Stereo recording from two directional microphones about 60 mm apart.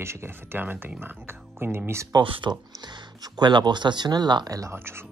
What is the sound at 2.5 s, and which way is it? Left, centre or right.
Speech, right.